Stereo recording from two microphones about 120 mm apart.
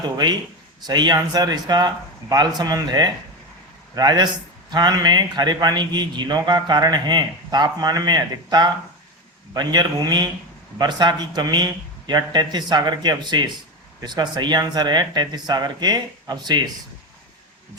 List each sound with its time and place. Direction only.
0.9 s a man's voice: 35° right (ahead or behind)